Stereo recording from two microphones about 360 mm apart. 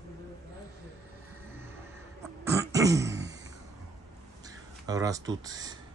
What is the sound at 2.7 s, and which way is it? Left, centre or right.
Throat clearing, centre.